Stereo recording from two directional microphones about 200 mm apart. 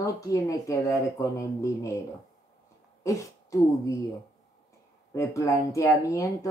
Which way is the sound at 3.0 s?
15° left (ahead or behind).